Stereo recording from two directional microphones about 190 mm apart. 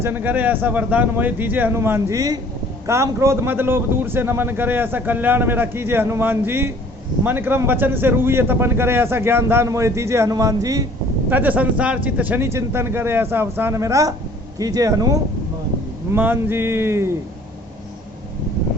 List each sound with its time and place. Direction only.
0.0 s a man's voice: 10° right (ahead or behind)